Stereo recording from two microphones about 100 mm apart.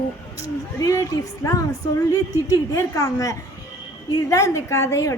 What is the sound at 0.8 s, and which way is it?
A woman's voice, 35° left (ahead or behind).